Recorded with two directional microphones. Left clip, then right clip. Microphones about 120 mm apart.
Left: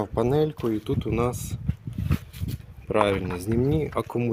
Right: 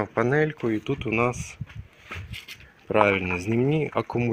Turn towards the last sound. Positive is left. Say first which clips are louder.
# right 1 dB
turn(degrees=5)  # may be behind; listen again after turning